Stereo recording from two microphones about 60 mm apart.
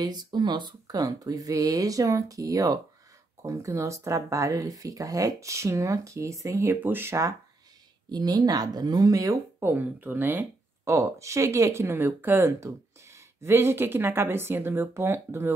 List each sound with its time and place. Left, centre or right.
0.8 s speech: right
3.4 s speech: right
8.3 s speech: right
9.6 s speech: right
10.9 s speech: right
12.5 s speech: right